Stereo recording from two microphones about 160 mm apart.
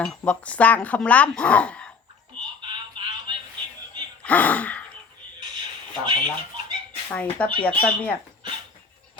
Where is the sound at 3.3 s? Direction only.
25° right (ahead or behind).